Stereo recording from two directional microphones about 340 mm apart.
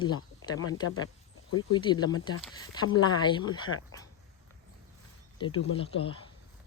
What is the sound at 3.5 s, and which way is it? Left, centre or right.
Speech, left.